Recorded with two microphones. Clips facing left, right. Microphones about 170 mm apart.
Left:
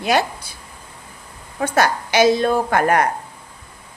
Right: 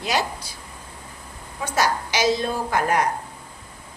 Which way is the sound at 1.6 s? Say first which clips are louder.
Left 4 dB; 60° left (ahead or behind).